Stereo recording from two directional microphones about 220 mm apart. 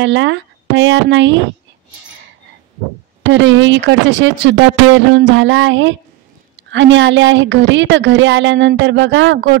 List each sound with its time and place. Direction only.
0.0 s a woman's voice: 55° right (ahead or behind)
3.3 s a woman's voice: 55° right (ahead or behind)